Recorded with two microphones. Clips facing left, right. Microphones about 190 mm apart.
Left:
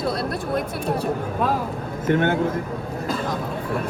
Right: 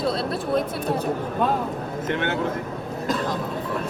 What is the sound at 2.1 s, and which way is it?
Speech, 45° left (ahead or behind).